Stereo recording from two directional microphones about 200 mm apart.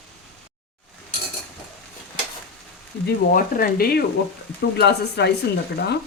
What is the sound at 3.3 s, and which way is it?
Speech, 45° left (ahead or behind).